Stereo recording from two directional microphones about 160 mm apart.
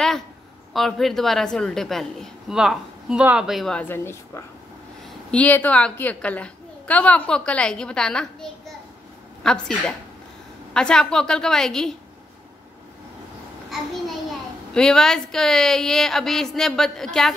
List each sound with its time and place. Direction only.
0.7 s a woman's voice: centre (ahead or behind)
3.9 s a woman's voice: 15° left (ahead or behind)
14.7 s a woman's voice: 5° left (ahead or behind)